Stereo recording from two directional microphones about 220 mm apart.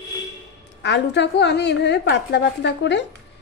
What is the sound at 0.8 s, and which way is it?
A woman's voice, 55° left (ahead or behind).